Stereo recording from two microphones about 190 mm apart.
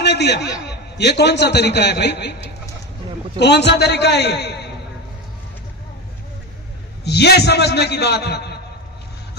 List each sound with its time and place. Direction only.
0.0 s a man's voice: 65° left (ahead or behind)
3.3 s a man's voice: 60° left (ahead or behind)
7.0 s a man's voice: 60° left (ahead or behind)